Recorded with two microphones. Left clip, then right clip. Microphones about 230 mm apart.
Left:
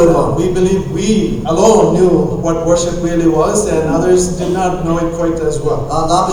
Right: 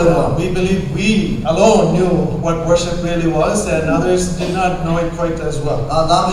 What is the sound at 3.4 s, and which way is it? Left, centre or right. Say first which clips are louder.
Speech: left 3 dB; right.